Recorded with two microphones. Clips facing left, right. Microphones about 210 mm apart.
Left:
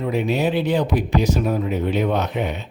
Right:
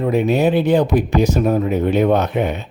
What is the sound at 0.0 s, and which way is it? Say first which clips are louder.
Speech: right 5 dB; 50° right (ahead or behind).